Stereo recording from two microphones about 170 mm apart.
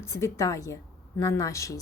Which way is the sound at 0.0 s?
15° left (ahead or behind).